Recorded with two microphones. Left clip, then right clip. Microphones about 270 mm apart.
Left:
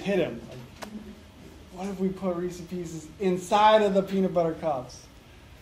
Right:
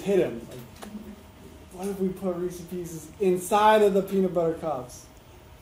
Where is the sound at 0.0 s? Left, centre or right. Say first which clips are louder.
Right 3 dB; centre.